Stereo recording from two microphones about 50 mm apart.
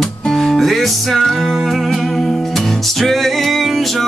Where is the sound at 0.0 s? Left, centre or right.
Centre.